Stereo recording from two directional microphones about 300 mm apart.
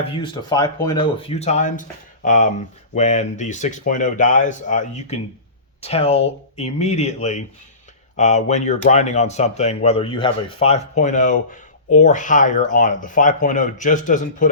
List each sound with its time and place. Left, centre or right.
0.1 s speech: centre